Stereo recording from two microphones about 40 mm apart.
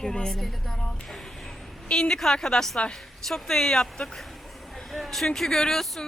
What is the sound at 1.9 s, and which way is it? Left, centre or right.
A woman's voice, centre.